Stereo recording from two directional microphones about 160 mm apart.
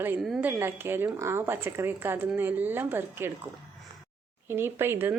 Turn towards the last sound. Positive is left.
turn(degrees=-15)  # may be behind; listen again after turning